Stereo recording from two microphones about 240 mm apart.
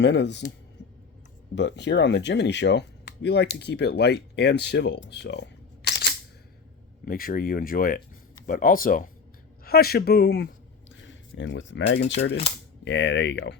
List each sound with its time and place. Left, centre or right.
0.0 s speech: left
1.5 s speech: left